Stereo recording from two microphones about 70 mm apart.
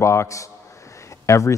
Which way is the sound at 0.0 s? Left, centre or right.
Left.